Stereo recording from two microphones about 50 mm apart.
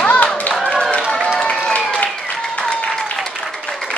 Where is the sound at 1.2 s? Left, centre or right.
Left.